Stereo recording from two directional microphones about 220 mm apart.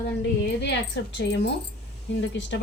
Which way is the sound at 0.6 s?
55° left (ahead or behind).